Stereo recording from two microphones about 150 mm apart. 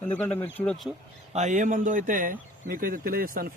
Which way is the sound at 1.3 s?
55° right (ahead or behind).